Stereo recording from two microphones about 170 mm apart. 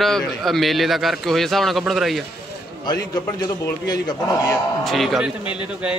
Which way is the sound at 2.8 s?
25° left (ahead or behind).